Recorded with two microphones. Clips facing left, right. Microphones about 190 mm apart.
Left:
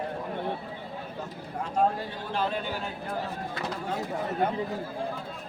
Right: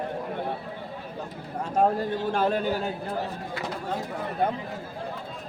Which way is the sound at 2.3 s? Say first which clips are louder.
Right 4 dB; 45° right (ahead or behind).